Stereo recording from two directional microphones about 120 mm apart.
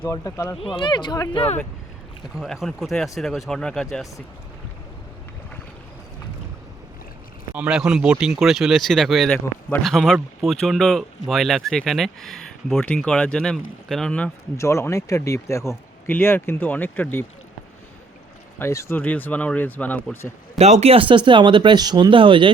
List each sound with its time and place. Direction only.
0.0 s speech: 25° left (ahead or behind)
0.6 s speech: 40° left (ahead or behind)
1.3 s speech: 50° left (ahead or behind)
2.3 s speech: centre (ahead or behind)
7.5 s speech: 10° right (ahead or behind); by 14.3 s 5° left (ahead or behind)
14.5 s speech: 25° left (ahead or behind)
18.6 s speech: 20° left (ahead or behind)
20.6 s speech: 65° right (ahead or behind); by 22.5 s 45° right (ahead or behind)